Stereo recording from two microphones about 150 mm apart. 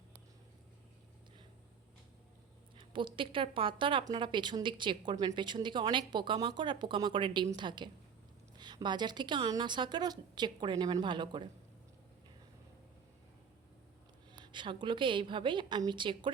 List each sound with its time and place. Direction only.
2.7 s a woman's voice: 35° right (ahead or behind)
14.3 s speech: 30° right (ahead or behind)